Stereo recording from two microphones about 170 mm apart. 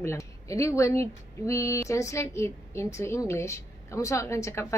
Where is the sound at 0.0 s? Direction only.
15° left (ahead or behind).